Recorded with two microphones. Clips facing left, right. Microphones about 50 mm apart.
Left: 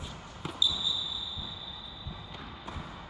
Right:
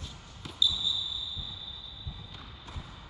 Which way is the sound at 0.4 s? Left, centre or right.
Centre.